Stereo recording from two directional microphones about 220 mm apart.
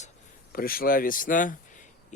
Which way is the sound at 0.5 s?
40° left (ahead or behind).